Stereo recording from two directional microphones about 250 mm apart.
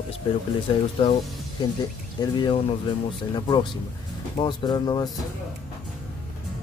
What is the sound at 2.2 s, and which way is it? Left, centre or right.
Speech, centre.